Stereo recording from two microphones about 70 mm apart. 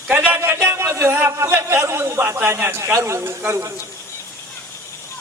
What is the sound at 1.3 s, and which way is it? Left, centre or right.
A man's voice, right.